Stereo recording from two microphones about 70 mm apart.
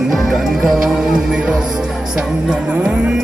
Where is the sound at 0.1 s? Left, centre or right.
Centre.